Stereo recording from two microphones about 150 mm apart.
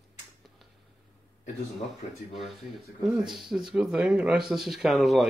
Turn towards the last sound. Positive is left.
turn(degrees=0)  # may be behind; listen again after turning